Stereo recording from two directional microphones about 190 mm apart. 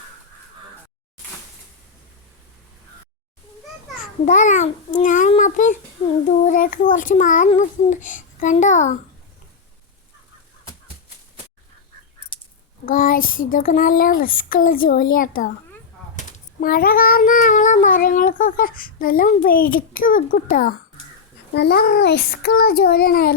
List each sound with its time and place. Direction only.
4.3 s a child's voice: 40° left (ahead or behind)
12.8 s child singing: 45° left (ahead or behind)
21.5 s a child's voice: 60° left (ahead or behind)